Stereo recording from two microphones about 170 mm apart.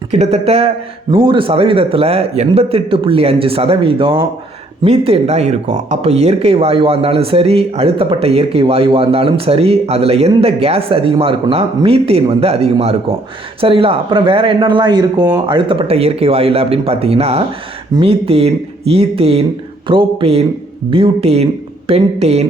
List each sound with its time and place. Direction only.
0.1 s speech: 40° right (ahead or behind)